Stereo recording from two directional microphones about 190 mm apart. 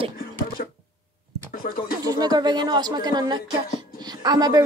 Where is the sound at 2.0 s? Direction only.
20° right (ahead or behind).